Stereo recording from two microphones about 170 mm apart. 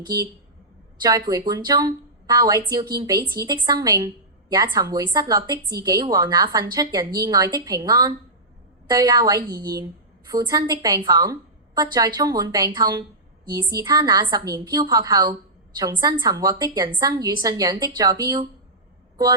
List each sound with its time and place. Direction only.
1.0 s a woman's voice: 25° right (ahead or behind)